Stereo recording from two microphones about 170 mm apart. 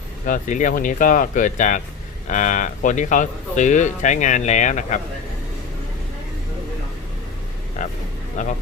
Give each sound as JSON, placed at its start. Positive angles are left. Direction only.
{"t": 0.3, "sound": "speech", "side_deg": 50}
{"t": 7.8, "sound": "speech", "side_deg": 50}